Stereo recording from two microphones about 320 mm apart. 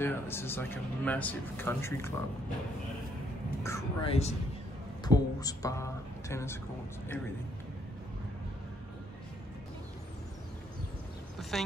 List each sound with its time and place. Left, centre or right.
0.0 s speech: centre
3.6 s speech: centre
11.5 s speech: centre